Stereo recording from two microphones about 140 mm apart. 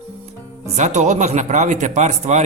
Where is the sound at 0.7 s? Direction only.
55° right (ahead or behind).